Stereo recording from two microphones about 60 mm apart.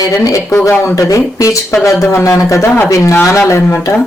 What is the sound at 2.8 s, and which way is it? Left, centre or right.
Speech, left.